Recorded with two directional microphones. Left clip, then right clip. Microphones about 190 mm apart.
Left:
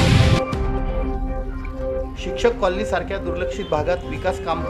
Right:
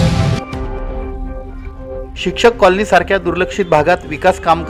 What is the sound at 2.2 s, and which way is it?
A man's voice, 40° right (ahead or behind).